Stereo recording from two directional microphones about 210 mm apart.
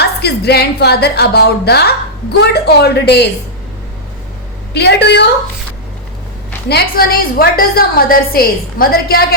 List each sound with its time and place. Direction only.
0.0 s a woman's voice: 50° left (ahead or behind)
4.7 s a woman's voice: 50° left (ahead or behind)
6.7 s a woman's voice: 45° left (ahead or behind)